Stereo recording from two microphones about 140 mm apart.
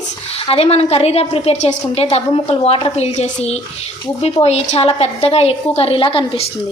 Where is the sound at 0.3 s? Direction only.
45° left (ahead or behind).